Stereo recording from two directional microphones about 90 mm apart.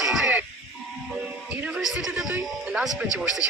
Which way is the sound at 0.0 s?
5° right (ahead or behind).